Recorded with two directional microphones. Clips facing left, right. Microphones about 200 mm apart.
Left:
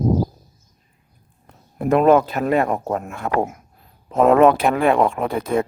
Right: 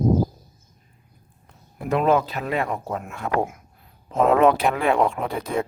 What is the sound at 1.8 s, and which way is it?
Speech, 50° left (ahead or behind).